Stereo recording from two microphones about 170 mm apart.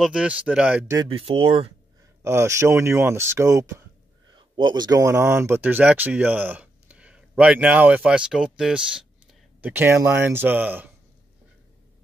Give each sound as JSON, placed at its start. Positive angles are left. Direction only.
{"t": 0.0, "sound": "speech", "side_deg": -5}
{"t": 0.9, "sound": "speech", "side_deg": -35}
{"t": 2.2, "sound": "speech", "side_deg": -15}